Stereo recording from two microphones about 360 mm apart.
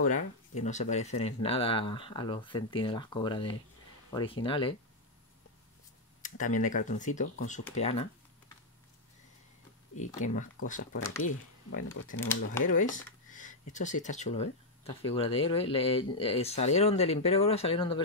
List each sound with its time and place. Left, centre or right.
0.0 s speech: centre
6.2 s speech: left
9.9 s speech: left
11.9 s speech: left
12.6 s speech: left